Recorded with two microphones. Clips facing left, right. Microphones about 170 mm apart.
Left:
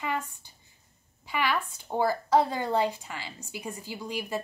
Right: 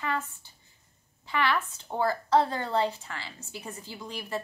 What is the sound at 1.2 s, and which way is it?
A woman's voice, 10° left (ahead or behind).